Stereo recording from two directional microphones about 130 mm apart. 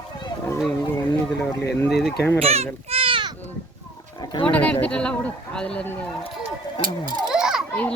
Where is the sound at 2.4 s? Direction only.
50° right (ahead or behind).